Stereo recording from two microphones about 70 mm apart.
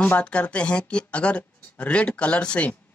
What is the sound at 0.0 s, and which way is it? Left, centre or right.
Speech, centre.